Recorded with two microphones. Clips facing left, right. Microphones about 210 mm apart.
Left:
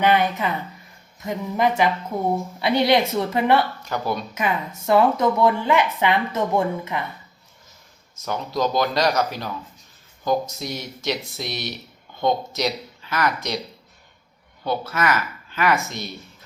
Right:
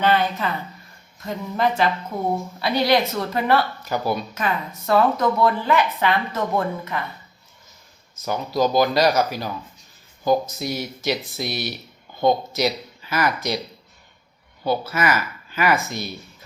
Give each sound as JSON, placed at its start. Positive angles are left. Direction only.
{"t": 0.0, "sound": "a woman's voice", "side_deg": 15}
{"t": 3.6, "sound": "speech", "side_deg": -5}
{"t": 4.4, "sound": "a woman's voice", "side_deg": 20}
{"t": 8.3, "sound": "speech", "side_deg": -5}
{"t": 14.6, "sound": "speech", "side_deg": -5}